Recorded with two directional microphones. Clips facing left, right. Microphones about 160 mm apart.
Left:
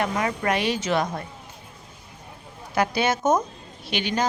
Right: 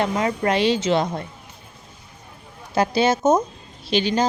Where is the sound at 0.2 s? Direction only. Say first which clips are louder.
Right 4 dB; 25° right (ahead or behind).